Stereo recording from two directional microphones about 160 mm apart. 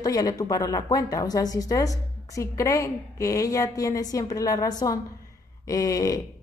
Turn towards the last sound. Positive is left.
turn(degrees=20)  # may be behind; listen again after turning